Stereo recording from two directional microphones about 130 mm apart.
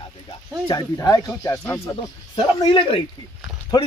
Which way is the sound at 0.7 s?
30° left (ahead or behind).